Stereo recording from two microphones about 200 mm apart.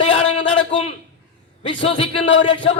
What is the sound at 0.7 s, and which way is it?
A man's voice, 25° left (ahead or behind).